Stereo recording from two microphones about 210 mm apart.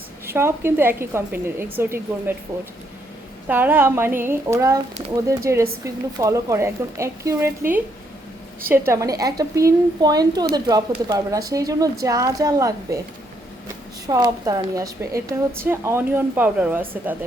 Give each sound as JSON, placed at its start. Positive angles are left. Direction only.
{"t": 0.3, "sound": "a woman's voice", "side_deg": -10}
{"t": 3.5, "sound": "a woman's voice", "side_deg": -10}
{"t": 14.1, "sound": "a woman's voice", "side_deg": -20}